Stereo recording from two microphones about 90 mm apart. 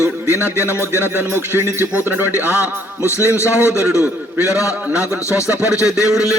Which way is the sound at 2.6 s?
30° left (ahead or behind).